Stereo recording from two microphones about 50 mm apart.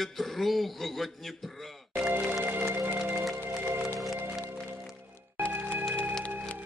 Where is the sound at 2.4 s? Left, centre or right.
Right.